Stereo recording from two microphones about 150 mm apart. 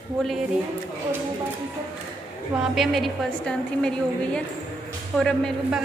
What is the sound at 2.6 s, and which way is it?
A woman's voice, centre (ahead or behind).